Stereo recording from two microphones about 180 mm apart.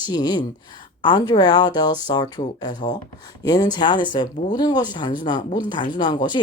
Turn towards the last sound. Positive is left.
turn(degrees=25)  # may be behind; listen again after turning